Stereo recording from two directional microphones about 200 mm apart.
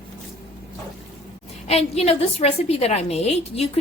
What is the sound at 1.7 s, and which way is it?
A woman's voice, 30° left (ahead or behind).